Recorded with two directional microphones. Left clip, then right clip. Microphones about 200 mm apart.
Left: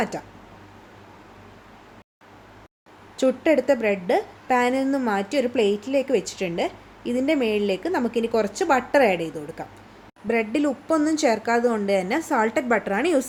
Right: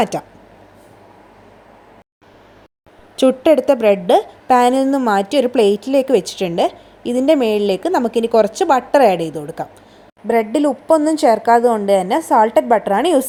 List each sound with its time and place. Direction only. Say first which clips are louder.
0.0 s a woman's voice: right 9 dB; 40° right (ahead or behind)
3.2 s a woman's voice: right 8 dB; 40° right (ahead or behind); by 13.2 s 25° right (ahead or behind)